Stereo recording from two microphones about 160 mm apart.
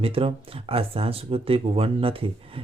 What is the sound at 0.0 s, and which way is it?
Speech, 35° right (ahead or behind).